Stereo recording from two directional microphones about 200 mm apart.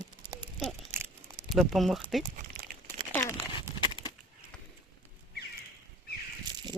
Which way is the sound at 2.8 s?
10° left (ahead or behind).